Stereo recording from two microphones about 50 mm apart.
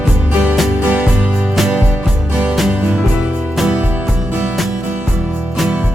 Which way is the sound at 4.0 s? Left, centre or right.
Centre.